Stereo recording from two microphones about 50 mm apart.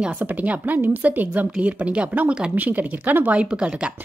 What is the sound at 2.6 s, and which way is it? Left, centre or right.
Speech, right.